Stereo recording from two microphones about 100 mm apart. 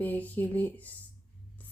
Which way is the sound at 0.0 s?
15° left (ahead or behind).